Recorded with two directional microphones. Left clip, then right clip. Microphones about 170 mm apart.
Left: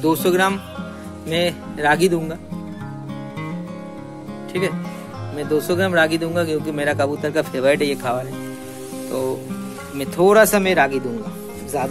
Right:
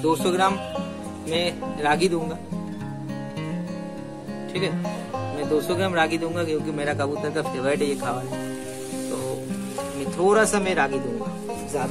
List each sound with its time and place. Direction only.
0.0 s speech: 50° left (ahead or behind)
5.4 s speech: 40° left (ahead or behind)
10.1 s speech: 50° left (ahead or behind)